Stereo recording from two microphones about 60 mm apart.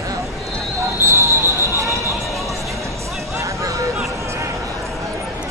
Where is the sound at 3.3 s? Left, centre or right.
Right.